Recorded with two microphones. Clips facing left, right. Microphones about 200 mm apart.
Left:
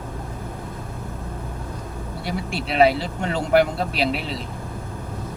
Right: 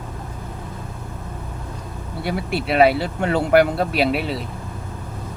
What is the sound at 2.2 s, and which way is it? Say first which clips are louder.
Speech: right 5 dB; 60° right (ahead or behind).